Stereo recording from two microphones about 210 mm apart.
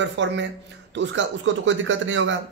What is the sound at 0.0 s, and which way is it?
A man's voice, 60° right (ahead or behind).